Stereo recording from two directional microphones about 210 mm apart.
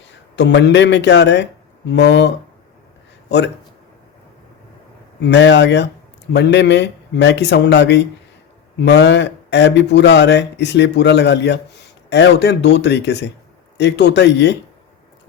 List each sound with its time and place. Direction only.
0.3 s speech: 55° left (ahead or behind)
5.2 s speech: 55° left (ahead or behind)